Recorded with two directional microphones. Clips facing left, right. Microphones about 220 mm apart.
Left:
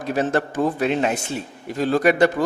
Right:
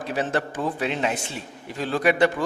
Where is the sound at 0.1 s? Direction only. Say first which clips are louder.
Left 5 dB; 45° left (ahead or behind).